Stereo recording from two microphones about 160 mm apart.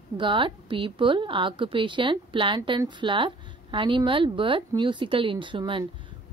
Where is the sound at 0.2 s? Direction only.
30° right (ahead or behind).